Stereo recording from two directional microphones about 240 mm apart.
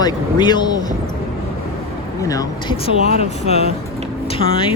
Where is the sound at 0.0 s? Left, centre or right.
Centre.